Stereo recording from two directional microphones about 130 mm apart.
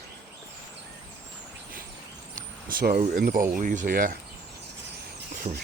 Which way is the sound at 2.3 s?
90° right.